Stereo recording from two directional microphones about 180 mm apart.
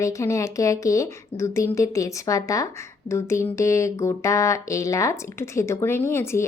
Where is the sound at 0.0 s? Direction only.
15° left (ahead or behind).